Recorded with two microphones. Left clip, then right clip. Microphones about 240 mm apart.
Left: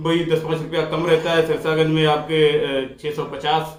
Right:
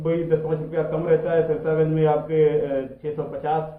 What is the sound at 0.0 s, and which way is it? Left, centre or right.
A man's voice, centre.